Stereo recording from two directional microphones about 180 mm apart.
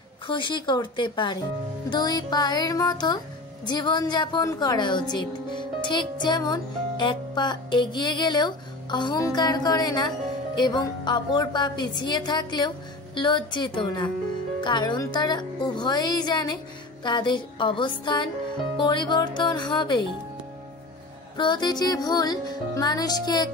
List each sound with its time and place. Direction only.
0.3 s a woman's voice: 25° left (ahead or behind)
21.4 s a woman's voice: 25° left (ahead or behind)